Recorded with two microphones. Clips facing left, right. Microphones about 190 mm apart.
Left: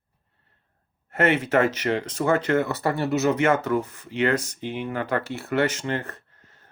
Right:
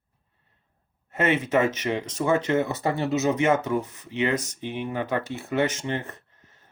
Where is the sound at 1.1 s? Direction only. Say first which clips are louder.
Left 2 dB; 65° left (ahead or behind).